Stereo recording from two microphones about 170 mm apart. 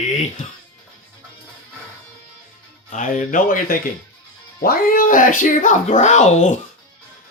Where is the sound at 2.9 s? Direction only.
50° left (ahead or behind).